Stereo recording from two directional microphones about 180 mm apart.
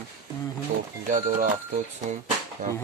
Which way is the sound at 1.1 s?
45° right (ahead or behind).